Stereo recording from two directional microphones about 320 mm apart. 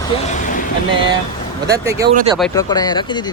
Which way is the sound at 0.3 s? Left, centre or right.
Left.